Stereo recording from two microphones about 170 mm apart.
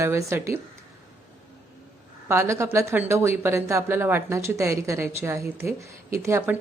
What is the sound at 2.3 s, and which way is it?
Speech, 15° right (ahead or behind).